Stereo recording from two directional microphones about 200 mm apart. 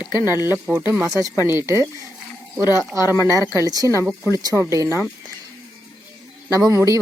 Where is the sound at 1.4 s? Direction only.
15° right (ahead or behind).